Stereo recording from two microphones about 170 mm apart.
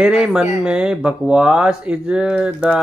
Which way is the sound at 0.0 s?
5° right (ahead or behind).